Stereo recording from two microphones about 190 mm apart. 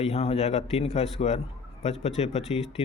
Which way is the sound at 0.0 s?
35° left (ahead or behind).